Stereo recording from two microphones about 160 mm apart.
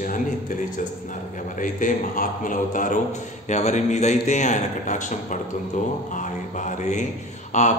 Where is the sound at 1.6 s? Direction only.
55° left (ahead or behind).